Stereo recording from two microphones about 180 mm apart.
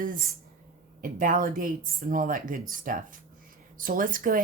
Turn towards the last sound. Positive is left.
turn(degrees=-50)  # may be behind; listen again after turning